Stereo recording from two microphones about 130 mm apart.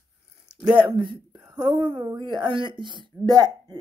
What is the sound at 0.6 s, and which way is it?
Speech, 40° right (ahead or behind).